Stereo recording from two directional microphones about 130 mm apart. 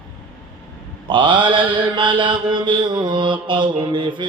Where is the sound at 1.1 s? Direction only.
40° right (ahead or behind).